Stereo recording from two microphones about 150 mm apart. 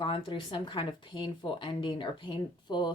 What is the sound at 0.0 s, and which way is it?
Speech, 30° left (ahead or behind).